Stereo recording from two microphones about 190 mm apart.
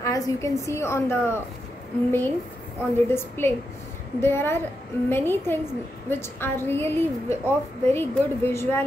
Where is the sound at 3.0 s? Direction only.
10° left (ahead or behind).